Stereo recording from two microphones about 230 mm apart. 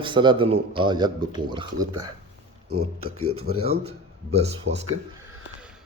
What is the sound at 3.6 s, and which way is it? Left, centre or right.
Speech, right.